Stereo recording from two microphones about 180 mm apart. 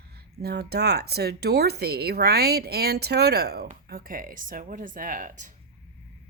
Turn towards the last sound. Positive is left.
turn(degrees=-45)  # may be behind; listen again after turning